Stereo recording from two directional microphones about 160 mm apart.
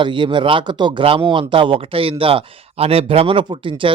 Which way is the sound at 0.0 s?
30° right (ahead or behind).